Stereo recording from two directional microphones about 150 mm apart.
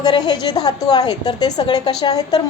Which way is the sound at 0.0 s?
30° left (ahead or behind).